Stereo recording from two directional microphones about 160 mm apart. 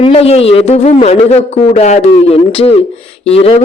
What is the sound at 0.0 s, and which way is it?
A man's voice, 40° left (ahead or behind).